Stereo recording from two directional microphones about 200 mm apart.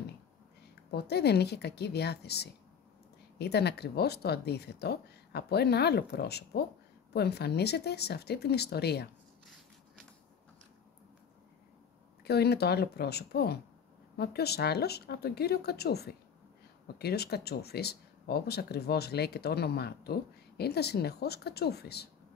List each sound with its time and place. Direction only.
0.9 s a woman's voice: 55° left (ahead or behind)
12.3 s speech: 55° left (ahead or behind)